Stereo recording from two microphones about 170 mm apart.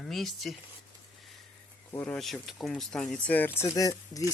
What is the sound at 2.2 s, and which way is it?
Speech, centre (ahead or behind).